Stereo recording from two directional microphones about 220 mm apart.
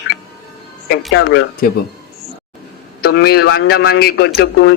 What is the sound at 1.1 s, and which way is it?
Speech, 50° left (ahead or behind).